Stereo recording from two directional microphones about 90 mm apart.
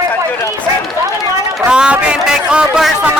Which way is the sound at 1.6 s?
10° right (ahead or behind).